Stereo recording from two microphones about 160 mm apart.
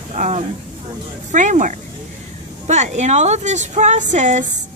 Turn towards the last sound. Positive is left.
turn(degrees=-50)  # may be behind; listen again after turning